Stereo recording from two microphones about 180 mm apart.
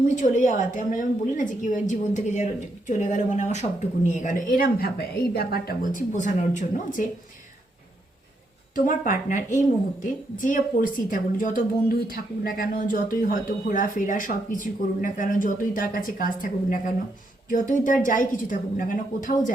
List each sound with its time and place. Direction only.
0.2 s speech: 45° left (ahead or behind)
8.7 s speech: 45° left (ahead or behind)